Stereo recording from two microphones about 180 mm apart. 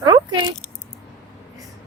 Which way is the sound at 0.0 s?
25° right (ahead or behind).